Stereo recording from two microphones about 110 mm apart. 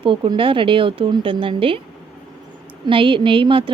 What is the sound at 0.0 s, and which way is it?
A woman's voice, 50° right (ahead or behind).